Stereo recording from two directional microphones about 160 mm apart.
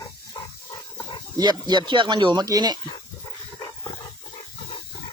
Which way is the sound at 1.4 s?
25° right (ahead or behind).